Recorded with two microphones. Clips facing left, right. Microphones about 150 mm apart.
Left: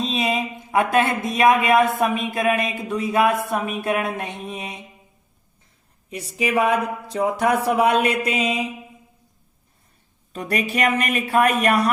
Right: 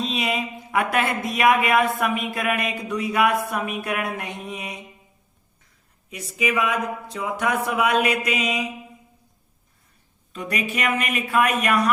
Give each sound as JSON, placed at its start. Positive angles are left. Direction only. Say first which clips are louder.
{"t": 0.0, "sound": "speech", "louder": "left 3 dB", "side_deg": 25}
{"t": 6.1, "sound": "speech", "louder": "left 1 dB", "side_deg": 35}
{"t": 10.3, "sound": "speech", "louder": "left 4 dB", "side_deg": 35}